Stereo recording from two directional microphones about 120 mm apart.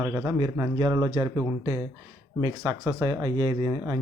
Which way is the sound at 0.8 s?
35° right (ahead or behind).